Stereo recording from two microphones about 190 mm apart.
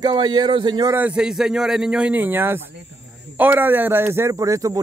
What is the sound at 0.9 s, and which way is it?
A man's voice, 5° right (ahead or behind).